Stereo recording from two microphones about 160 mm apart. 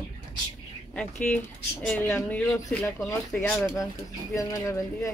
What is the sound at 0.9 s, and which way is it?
Speech, 5° left (ahead or behind).